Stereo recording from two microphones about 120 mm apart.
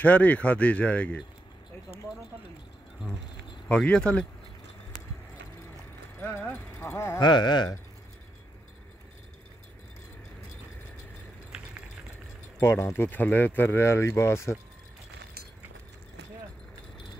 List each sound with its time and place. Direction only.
0.0 s speech: 10° left (ahead or behind)
3.6 s speech: 10° left (ahead or behind)
6.8 s speech: 20° left (ahead or behind)
7.2 s speech: 40° left (ahead or behind)
12.5 s speech: 20° left (ahead or behind)